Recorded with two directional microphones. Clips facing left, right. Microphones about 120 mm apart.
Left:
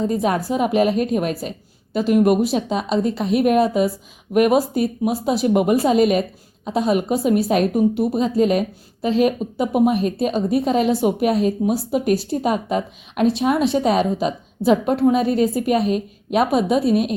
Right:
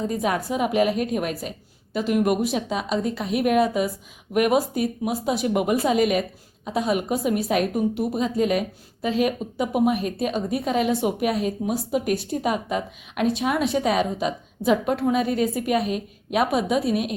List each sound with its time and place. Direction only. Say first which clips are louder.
0.1 s a woman's voice: left 4 dB; 30° left (ahead or behind)